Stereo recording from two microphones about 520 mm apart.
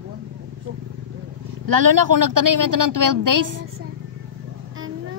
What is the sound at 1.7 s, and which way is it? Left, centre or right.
A woman's voice, right.